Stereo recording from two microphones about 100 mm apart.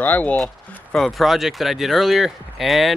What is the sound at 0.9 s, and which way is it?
Speech, centre (ahead or behind).